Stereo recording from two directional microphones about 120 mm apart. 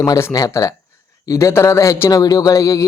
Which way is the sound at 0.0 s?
25° left (ahead or behind).